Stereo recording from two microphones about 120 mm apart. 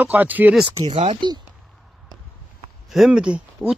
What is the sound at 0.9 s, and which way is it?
Speech, 50° right (ahead or behind).